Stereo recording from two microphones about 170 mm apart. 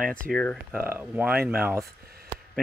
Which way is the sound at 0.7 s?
10° right (ahead or behind).